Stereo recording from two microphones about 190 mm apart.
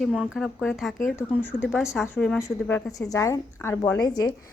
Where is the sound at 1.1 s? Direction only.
10° left (ahead or behind).